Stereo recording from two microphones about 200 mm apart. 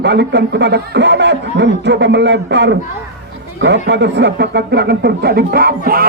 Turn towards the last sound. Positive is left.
turn(degrees=-50)  # may be behind; listen again after turning